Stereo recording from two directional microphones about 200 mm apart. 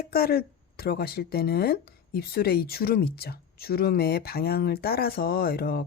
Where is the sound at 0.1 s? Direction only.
50° left (ahead or behind).